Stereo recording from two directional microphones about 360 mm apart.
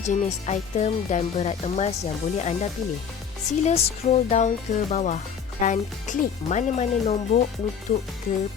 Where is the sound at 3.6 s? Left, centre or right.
Centre.